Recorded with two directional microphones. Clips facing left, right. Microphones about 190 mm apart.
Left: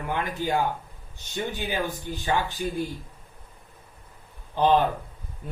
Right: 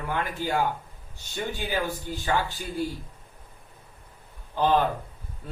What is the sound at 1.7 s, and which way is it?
Speech, 20° left (ahead or behind).